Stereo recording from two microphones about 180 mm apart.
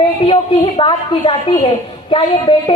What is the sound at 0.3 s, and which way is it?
Speech, 30° left (ahead or behind).